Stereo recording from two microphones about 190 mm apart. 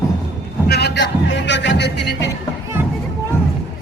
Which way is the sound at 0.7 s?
65° left (ahead or behind).